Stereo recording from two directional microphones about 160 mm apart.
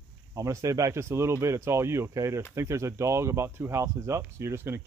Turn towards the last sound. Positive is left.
turn(degrees=-15)  # may be behind; listen again after turning